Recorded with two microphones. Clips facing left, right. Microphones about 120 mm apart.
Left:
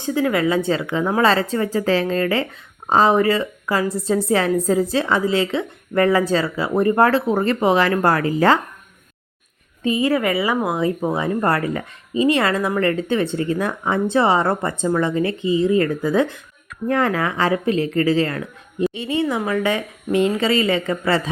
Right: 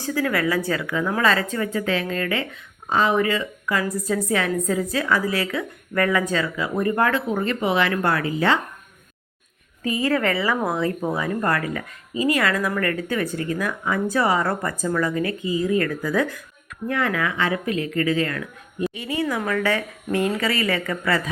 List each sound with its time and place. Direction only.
0.0 s speech: 20° left (ahead or behind); by 8.5 s 40° left (ahead or behind)
9.8 s speech: 20° left (ahead or behind)
16.9 s speech: 35° left (ahead or behind)